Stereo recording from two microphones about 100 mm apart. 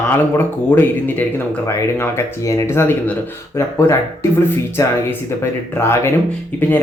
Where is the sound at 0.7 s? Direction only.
20° left (ahead or behind).